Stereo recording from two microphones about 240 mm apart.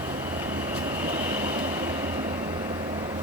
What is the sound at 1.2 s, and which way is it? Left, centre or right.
Train, centre.